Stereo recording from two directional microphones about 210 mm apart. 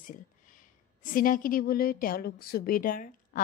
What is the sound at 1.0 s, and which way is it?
A woman's voice, 40° left (ahead or behind).